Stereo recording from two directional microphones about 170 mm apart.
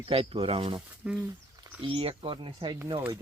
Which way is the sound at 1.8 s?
30° right (ahead or behind).